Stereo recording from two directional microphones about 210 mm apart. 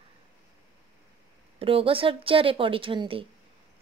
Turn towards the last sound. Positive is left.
turn(degrees=-25)  # may be behind; listen again after turning